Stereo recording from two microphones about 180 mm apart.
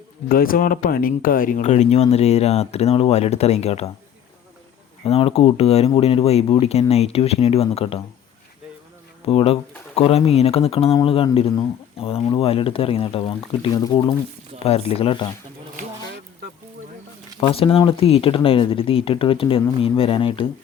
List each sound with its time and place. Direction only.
0.3 s speech: 55° left (ahead or behind); by 3.8 s 35° left (ahead or behind)
5.0 s speech: 35° left (ahead or behind)
9.2 s speech: 35° left (ahead or behind)
14.6 s speech: 35° left (ahead or behind)
17.4 s speech: 30° left (ahead or behind)